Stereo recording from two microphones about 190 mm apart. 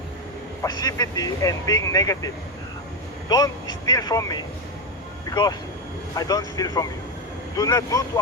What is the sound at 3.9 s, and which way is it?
A man's voice, 20° left (ahead or behind).